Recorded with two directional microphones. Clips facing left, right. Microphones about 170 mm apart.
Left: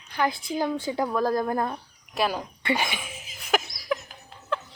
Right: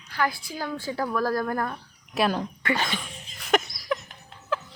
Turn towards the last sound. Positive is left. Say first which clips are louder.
# right 1 dB
turn(degrees=0)  # may be behind; listen again after turning